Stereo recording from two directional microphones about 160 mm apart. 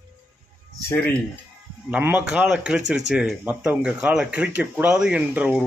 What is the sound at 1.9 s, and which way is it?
Speech, 10° right (ahead or behind).